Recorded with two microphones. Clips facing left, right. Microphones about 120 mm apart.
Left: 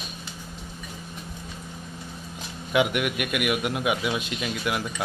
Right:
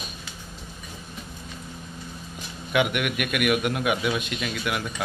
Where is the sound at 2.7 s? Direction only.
25° left (ahead or behind).